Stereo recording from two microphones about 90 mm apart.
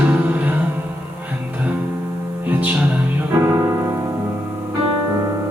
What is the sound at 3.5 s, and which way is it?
Music, 35° right (ahead or behind).